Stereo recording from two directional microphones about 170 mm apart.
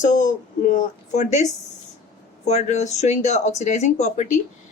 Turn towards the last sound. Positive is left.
turn(degrees=40)  # may be behind; listen again after turning